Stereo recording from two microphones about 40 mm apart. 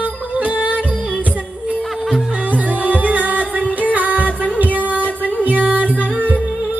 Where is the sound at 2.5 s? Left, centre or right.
Right.